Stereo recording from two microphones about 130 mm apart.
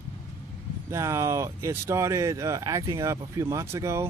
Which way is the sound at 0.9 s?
20° right (ahead or behind).